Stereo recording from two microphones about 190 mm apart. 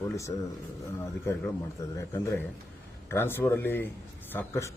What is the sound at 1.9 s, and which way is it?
A man's voice, 15° left (ahead or behind).